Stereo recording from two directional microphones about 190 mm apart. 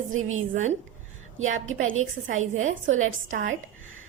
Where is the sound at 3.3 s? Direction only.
45° right (ahead or behind).